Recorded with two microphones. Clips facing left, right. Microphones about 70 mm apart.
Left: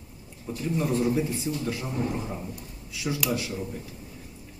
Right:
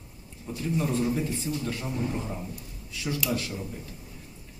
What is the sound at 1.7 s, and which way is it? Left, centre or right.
A man's voice, centre.